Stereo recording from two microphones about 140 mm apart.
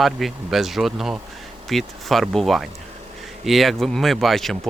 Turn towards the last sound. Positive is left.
turn(degrees=0)  # may be behind; listen again after turning